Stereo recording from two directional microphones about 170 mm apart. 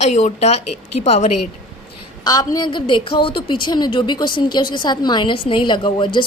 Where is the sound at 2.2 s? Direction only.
25° left (ahead or behind).